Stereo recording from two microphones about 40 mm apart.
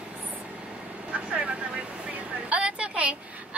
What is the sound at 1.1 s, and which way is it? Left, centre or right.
Speech, right.